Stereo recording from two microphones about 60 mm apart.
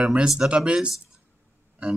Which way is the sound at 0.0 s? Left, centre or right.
Centre.